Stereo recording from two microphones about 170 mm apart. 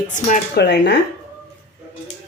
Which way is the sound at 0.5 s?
75° left (ahead or behind).